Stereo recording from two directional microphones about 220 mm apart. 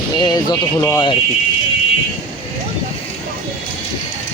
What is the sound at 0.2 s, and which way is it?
Speech, 20° left (ahead or behind).